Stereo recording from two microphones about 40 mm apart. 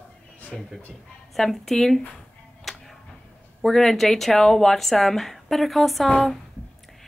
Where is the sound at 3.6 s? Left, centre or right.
Centre.